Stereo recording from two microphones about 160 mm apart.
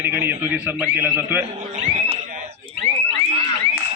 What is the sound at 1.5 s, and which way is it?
Fire alarm, 50° right (ahead or behind).